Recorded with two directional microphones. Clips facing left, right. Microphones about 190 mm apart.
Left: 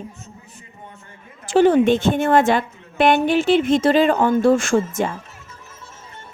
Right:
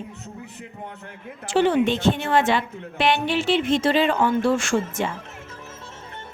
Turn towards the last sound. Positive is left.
turn(degrees=45)  # may be behind; listen again after turning